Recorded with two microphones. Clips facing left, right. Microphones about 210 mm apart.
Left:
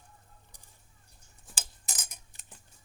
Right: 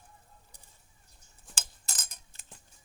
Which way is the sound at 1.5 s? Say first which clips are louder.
Left 1 dB; 15° left (ahead or behind).